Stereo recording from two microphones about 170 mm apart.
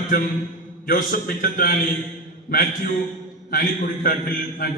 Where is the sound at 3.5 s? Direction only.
55° left (ahead or behind).